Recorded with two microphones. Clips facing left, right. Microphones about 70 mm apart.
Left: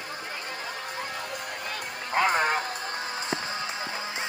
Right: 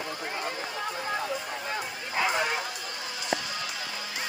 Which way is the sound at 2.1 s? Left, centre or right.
Left.